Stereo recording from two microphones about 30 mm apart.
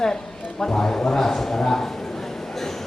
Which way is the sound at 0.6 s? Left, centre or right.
Centre.